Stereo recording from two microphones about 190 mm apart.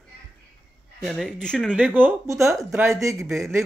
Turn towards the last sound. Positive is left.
turn(degrees=-15)  # may be behind; listen again after turning